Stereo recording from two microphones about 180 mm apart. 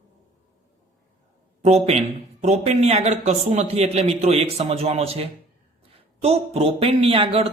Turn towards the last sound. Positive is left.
turn(degrees=-30)  # may be behind; listen again after turning